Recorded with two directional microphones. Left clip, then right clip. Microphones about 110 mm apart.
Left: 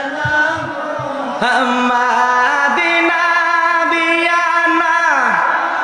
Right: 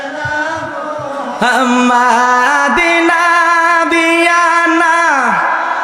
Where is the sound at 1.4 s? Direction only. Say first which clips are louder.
Right 3 dB; 45° right (ahead or behind).